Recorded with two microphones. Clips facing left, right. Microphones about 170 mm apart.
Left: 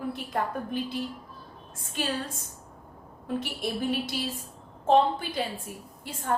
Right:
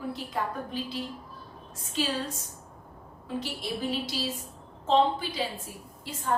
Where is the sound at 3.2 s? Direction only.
55° left (ahead or behind).